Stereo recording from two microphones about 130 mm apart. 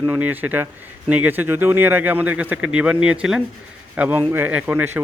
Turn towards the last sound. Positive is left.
turn(degrees=-15)  # may be behind; listen again after turning